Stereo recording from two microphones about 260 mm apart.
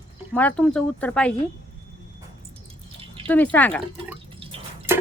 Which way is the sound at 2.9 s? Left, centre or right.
Right.